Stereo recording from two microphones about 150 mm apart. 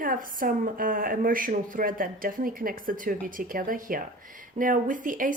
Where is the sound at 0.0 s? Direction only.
65° right (ahead or behind).